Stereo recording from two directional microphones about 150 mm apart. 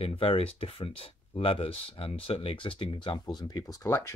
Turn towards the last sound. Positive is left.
turn(degrees=20)  # may be behind; listen again after turning